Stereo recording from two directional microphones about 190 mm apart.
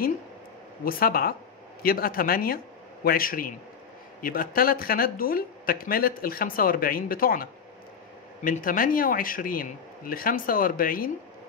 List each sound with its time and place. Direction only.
0.8 s speech: 50° left (ahead or behind)
8.5 s speech: 45° left (ahead or behind)